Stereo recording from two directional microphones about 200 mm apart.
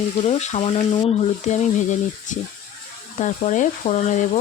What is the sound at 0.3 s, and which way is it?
Speech, 35° left (ahead or behind).